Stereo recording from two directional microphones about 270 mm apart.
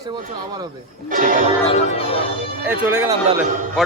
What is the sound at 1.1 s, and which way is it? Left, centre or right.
Music, right.